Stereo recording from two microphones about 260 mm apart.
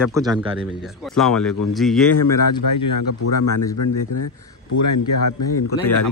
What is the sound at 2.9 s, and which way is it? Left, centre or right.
Speech, left.